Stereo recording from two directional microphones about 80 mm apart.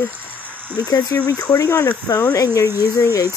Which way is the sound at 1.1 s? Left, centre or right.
Left.